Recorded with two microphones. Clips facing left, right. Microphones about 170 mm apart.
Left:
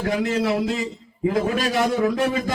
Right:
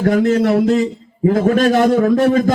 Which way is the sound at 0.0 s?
45° right (ahead or behind).